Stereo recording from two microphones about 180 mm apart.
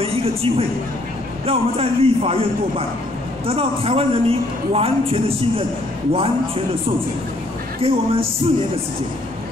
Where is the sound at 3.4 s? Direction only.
35° right (ahead or behind).